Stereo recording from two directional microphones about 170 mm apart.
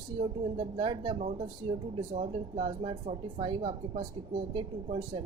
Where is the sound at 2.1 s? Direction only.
40° right (ahead or behind).